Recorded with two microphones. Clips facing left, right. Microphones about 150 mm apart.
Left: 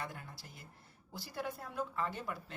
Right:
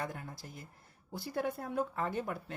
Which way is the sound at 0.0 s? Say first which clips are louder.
Right 5 dB; 45° right (ahead or behind).